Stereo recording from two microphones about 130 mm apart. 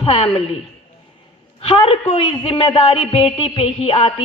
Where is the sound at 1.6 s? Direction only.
50° left (ahead or behind).